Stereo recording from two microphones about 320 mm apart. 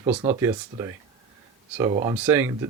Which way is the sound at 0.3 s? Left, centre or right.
Centre.